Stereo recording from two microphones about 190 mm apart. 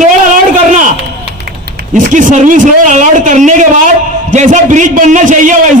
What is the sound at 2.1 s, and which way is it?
A man's voice, 40° right (ahead or behind).